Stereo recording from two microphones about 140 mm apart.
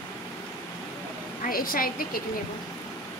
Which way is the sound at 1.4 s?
90° left.